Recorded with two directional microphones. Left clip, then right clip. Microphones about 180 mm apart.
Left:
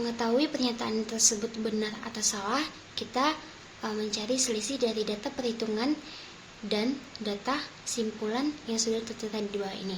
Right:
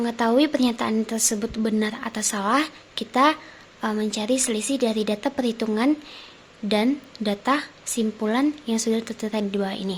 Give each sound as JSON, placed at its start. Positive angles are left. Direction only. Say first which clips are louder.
{"t": 0.0, "sound": "speech", "louder": "right 7 dB", "side_deg": -50}